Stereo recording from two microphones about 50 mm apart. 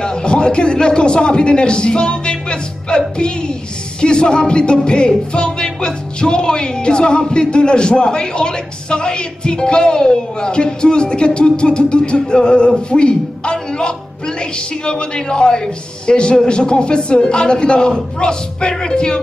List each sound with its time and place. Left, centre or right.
0.0 s a man's voice: centre
3.2 s music: centre